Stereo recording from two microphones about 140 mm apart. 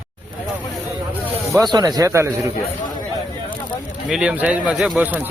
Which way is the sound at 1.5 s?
30° right (ahead or behind).